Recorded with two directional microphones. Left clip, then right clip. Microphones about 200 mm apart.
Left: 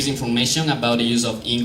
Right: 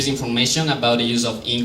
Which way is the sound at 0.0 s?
15° right (ahead or behind).